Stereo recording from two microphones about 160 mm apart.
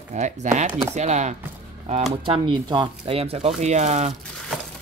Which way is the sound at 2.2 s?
30° right (ahead or behind).